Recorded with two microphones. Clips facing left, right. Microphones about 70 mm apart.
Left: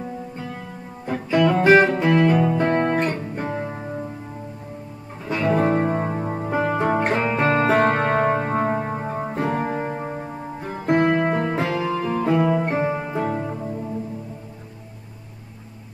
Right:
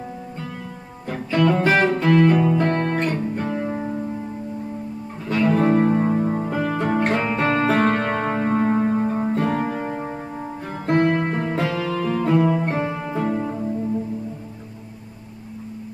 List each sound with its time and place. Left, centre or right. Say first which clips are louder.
1.0 s music: left 1 dB; centre
3.5 s music: right 3 dB; centre
5.3 s music: right 2 dB; centre